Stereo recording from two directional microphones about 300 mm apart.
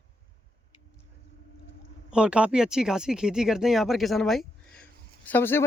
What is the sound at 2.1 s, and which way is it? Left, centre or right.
Speech, centre.